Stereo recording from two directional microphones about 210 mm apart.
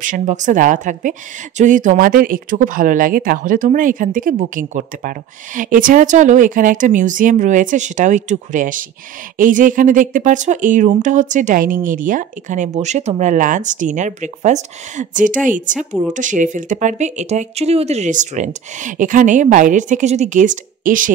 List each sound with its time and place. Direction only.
0.0 s speech: 35° right (ahead or behind)